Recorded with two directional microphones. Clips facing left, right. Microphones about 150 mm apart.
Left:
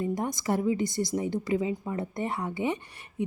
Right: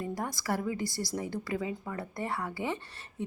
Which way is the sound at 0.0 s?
20° left (ahead or behind).